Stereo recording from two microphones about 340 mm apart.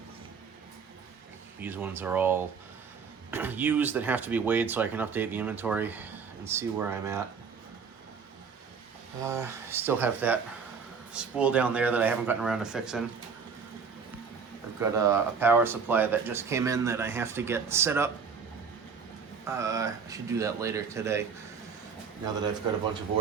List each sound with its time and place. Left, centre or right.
1.6 s speech: centre
9.2 s speech: centre
14.8 s speech: centre
19.5 s speech: centre